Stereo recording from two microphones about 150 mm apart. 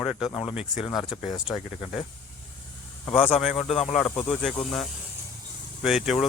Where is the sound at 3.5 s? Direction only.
40° left (ahead or behind).